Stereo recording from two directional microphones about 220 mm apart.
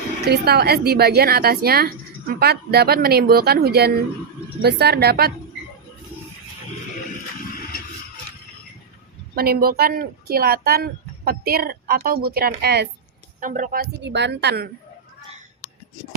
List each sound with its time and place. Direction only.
0.3 s speech: 45° right (ahead or behind)
9.3 s speech: 45° right (ahead or behind)
13.4 s speech: 35° right (ahead or behind)